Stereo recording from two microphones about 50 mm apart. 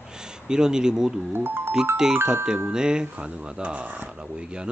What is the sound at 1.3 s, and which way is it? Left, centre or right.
Speech, right.